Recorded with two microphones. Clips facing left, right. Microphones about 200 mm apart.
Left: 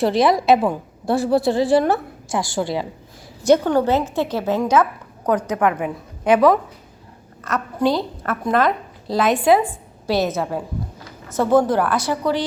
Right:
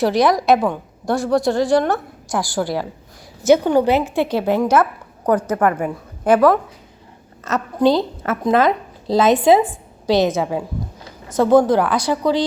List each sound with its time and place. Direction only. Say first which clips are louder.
0.0 s a woman's voice: right 1 dB; centre (ahead or behind)
3.6 s a woman's voice: right 2 dB; 15° right (ahead or behind)
7.4 s a woman's voice: right 3 dB; 25° right (ahead or behind)
8.5 s a woman's voice: right 2 dB; centre (ahead or behind)
9.1 s a woman's voice: right 3 dB; 20° right (ahead or behind)
10.2 s a woman's voice: right 3 dB; 10° right (ahead or behind)